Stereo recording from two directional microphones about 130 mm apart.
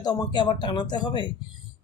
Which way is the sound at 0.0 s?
35° left (ahead or behind).